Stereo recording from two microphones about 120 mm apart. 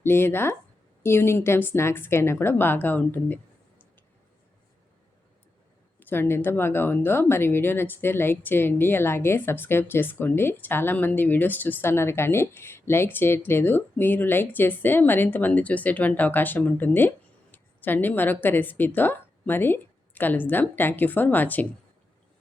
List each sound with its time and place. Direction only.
0.0 s speech: 20° left (ahead or behind)
6.0 s a woman's voice: 15° left (ahead or behind)